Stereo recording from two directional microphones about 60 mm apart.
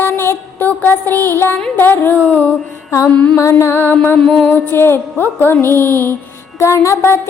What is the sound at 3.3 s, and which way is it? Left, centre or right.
Music, left.